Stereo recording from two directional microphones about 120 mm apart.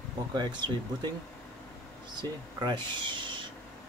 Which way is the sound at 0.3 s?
40° right (ahead or behind).